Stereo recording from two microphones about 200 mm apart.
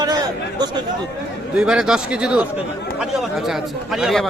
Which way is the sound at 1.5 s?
5° right (ahead or behind).